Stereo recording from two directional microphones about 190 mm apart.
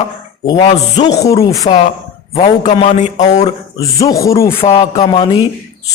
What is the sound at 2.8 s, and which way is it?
Speech, 35° left (ahead or behind).